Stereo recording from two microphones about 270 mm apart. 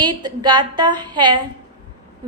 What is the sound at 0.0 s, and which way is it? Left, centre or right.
A woman's voice, centre.